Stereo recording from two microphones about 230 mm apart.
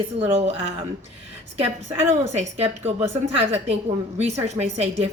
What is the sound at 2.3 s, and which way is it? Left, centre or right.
Speech, right.